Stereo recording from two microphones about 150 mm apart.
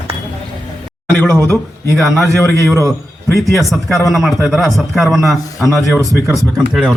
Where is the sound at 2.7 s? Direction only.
20° right (ahead or behind).